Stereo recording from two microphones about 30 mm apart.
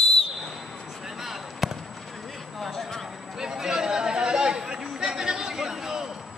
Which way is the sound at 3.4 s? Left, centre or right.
Centre.